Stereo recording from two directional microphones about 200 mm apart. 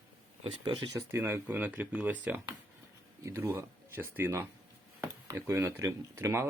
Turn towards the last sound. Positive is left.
turn(degrees=-10)  # may be behind; listen again after turning